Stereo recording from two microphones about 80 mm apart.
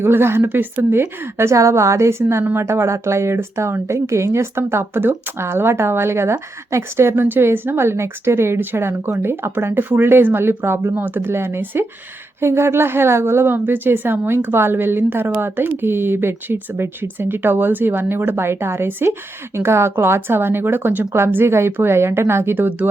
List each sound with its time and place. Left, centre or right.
0.0 s speech: right